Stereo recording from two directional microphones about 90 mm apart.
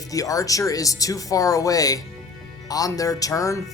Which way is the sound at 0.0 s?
40° left (ahead or behind).